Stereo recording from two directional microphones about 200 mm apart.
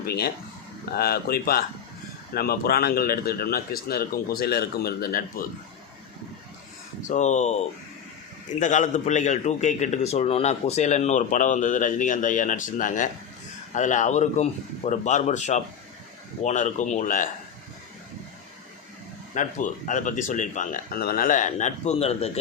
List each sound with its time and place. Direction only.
0.0 s a man's voice: 50° left (ahead or behind)
7.1 s a man's voice: 35° left (ahead or behind)
19.3 s a man's voice: 40° left (ahead or behind)